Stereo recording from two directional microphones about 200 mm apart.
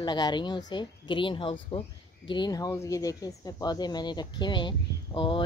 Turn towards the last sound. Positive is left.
turn(degrees=25)  # may be behind; listen again after turning